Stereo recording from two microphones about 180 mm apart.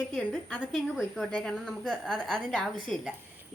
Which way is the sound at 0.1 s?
5° left (ahead or behind).